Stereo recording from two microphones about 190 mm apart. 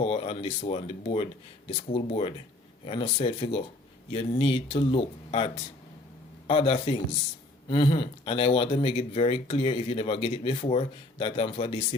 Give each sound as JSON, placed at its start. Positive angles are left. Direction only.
{"t": 0.0, "sound": "speech", "side_deg": 30}